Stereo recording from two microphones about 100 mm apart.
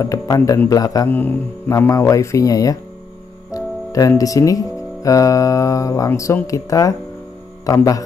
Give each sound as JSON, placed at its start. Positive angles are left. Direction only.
{"t": 0.0, "sound": "speech", "side_deg": 35}
{"t": 1.0, "sound": "speech", "side_deg": 20}
{"t": 1.8, "sound": "speech", "side_deg": 30}
{"t": 3.5, "sound": "music", "side_deg": 35}
{"t": 4.2, "sound": "speech", "side_deg": 35}